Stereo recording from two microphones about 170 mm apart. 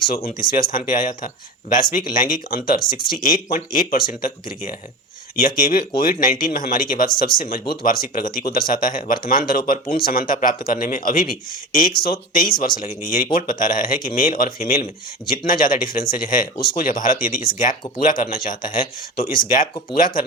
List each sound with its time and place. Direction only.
0.3 s a man's voice: 55° left (ahead or behind)